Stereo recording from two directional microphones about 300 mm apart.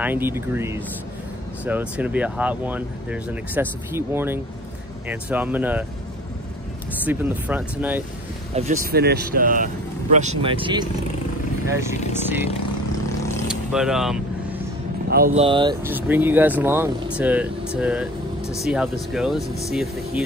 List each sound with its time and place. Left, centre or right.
0.0 s speech: centre
7.1 s speech: centre
8.5 s speech: right
13.5 s speech: centre
15.0 s speech: right; by 20.2 s centre